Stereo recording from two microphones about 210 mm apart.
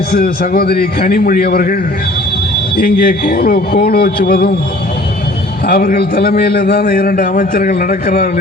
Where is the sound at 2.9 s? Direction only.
45° left (ahead or behind).